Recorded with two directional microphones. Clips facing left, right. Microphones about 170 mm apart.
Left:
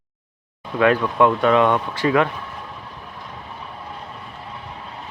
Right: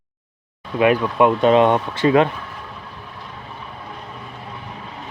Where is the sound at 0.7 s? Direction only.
15° right (ahead or behind).